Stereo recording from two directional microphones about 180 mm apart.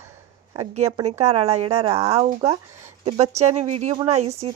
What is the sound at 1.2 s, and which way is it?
Speech, 35° right (ahead or behind).